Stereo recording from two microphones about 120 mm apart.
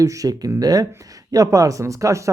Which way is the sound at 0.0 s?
30° right (ahead or behind).